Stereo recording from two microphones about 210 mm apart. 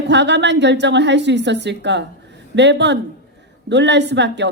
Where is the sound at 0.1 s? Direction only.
55° right (ahead or behind).